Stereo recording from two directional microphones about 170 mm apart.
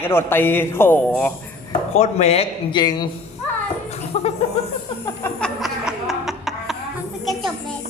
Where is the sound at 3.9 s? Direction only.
40° left (ahead or behind).